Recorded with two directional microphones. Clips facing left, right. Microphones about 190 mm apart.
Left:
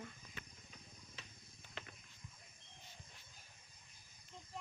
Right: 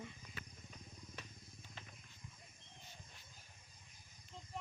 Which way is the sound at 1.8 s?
75° left (ahead or behind).